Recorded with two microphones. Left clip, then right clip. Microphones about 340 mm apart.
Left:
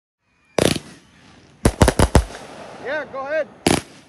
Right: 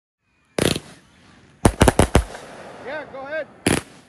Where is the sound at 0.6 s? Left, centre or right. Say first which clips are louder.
Left 3 dB; left.